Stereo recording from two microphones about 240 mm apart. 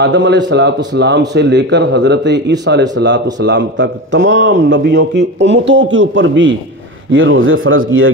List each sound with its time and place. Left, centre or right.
0.0 s a man's voice: right